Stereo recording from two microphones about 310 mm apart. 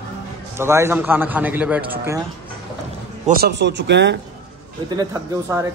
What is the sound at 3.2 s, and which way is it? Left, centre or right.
Speech, right.